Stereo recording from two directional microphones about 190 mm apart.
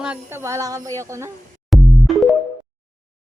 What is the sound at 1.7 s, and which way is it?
Music, centre (ahead or behind).